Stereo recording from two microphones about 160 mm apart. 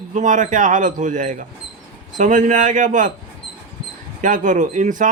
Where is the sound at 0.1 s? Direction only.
50° right (ahead or behind).